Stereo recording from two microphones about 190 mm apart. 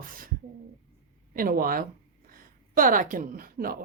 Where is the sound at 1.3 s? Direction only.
50° right (ahead or behind).